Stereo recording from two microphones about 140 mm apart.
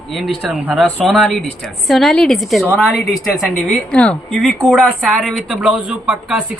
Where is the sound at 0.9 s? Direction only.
Centre (ahead or behind).